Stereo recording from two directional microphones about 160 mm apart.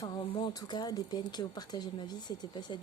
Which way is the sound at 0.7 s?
25° left (ahead or behind).